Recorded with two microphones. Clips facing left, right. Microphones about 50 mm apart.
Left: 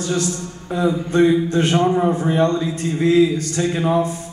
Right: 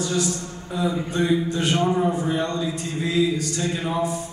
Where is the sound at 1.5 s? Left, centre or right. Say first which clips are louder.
Left 5 dB; left.